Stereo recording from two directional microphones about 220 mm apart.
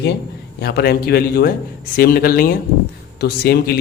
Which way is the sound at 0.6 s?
45° left (ahead or behind).